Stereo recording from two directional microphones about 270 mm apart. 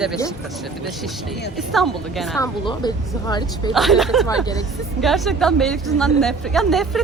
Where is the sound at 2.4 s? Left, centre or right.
Centre.